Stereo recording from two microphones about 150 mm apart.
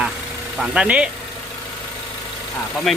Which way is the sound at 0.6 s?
5° right (ahead or behind).